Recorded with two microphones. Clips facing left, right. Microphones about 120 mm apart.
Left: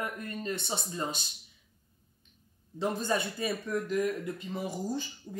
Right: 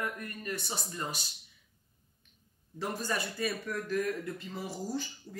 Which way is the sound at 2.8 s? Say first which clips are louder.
Left 4 dB; 20° left (ahead or behind).